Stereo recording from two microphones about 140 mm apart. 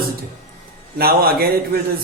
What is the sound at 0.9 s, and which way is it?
Speech, 90° right.